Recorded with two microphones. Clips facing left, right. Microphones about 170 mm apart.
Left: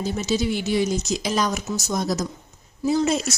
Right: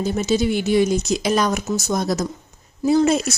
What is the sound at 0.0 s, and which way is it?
Speech, 55° right (ahead or behind).